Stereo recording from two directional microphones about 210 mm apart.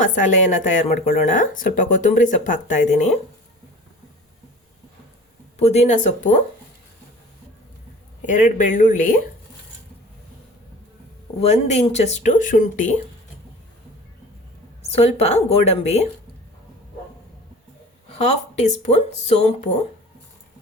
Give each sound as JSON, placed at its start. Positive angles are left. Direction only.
{"t": 0.0, "sound": "speech", "side_deg": 35}
{"t": 5.5, "sound": "speech", "side_deg": 30}
{"t": 8.3, "sound": "speech", "side_deg": 35}
{"t": 11.3, "sound": "speech", "side_deg": 30}
{"t": 14.8, "sound": "speech", "side_deg": 30}
{"t": 18.1, "sound": "speech", "side_deg": 30}